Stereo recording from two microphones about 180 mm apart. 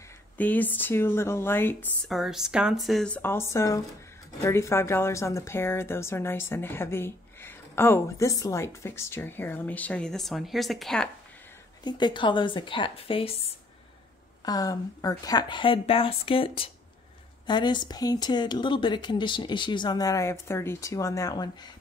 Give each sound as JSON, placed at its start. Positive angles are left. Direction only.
{"t": 0.4, "sound": "a woman's voice", "side_deg": 10}
{"t": 2.0, "sound": "a woman's voice", "side_deg": 0}
{"t": 11.8, "sound": "speech", "side_deg": 25}
{"t": 14.4, "sound": "speech", "side_deg": 20}